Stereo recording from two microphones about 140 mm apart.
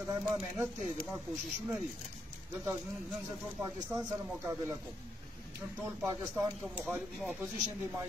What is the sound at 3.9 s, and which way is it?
Speech, 20° right (ahead or behind).